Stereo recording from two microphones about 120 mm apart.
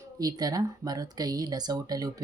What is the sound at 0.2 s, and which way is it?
Speech, 35° right (ahead or behind).